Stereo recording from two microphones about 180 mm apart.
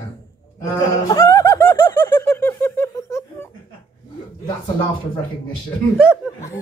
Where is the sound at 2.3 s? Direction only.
10° left (ahead or behind).